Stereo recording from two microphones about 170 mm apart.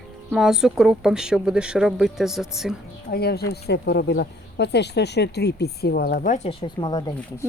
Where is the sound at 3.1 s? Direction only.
65° left (ahead or behind); by 7.4 s 25° left (ahead or behind).